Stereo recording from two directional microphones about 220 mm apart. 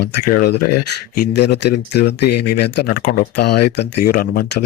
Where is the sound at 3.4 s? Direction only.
90° left.